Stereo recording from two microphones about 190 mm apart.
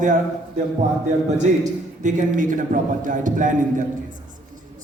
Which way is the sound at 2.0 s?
40° right (ahead or behind).